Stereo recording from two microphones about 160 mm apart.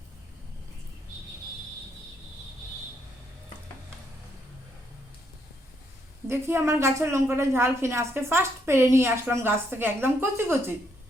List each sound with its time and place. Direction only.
6.2 s a woman's voice: 15° right (ahead or behind)